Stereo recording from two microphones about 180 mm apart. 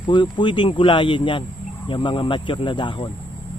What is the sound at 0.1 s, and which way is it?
Speech, 25° left (ahead or behind).